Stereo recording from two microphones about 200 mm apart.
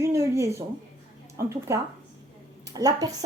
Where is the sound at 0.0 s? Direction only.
15° right (ahead or behind).